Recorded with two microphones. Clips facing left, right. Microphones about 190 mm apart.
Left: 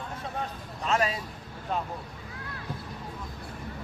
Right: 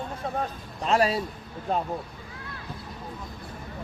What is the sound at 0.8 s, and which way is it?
Speech, 35° right (ahead or behind).